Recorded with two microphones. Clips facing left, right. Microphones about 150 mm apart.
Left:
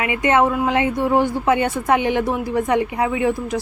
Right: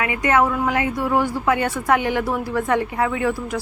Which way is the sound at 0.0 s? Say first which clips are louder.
Left 2 dB; 25° left (ahead or behind).